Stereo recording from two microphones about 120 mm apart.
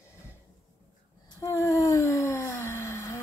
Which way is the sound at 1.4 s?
25° left (ahead or behind).